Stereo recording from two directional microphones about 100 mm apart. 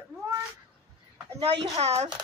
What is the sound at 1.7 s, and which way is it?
Speech, 90° right.